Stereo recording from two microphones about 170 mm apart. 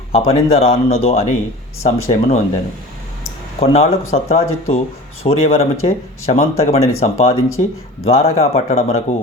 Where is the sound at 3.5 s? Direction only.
35° left (ahead or behind).